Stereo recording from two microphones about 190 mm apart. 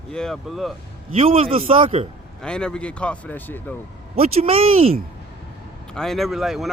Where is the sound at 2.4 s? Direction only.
5° left (ahead or behind).